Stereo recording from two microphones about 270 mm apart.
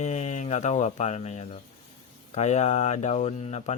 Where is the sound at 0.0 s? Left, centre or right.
Left.